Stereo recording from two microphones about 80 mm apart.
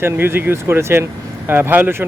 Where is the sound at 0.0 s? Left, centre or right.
Right.